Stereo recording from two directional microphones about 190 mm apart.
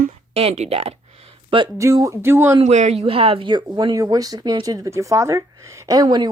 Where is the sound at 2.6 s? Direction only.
35° right (ahead or behind).